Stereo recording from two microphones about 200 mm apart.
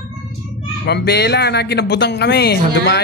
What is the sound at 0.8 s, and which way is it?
Speech, 55° left (ahead or behind).